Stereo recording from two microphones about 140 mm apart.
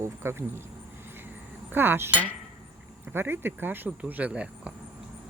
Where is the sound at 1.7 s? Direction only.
15° right (ahead or behind).